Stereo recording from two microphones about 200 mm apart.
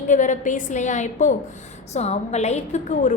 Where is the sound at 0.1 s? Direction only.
40° left (ahead or behind).